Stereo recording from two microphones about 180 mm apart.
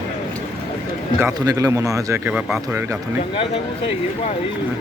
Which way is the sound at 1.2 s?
20° right (ahead or behind).